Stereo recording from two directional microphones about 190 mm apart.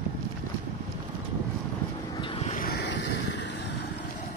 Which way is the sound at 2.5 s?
50° left (ahead or behind).